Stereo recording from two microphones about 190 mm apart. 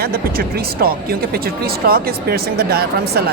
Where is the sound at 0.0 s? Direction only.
55° right (ahead or behind).